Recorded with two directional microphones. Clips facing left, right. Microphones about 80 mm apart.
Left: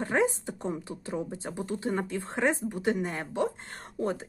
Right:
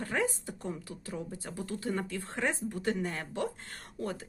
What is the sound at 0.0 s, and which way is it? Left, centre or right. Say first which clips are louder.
Speech: left 6 dB; left.